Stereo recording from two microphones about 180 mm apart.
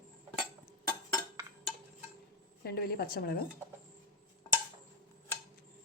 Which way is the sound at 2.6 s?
60° left (ahead or behind).